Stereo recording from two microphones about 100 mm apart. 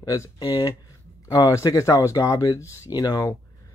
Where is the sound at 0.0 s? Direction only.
35° left (ahead or behind).